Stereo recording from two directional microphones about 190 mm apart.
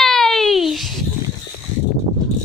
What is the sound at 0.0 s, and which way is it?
Babbling, centre (ahead or behind).